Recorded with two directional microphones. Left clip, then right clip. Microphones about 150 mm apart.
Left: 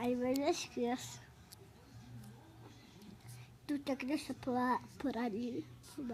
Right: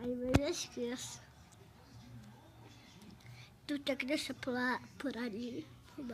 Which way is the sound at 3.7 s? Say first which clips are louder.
Right 2 dB; 25° left (ahead or behind).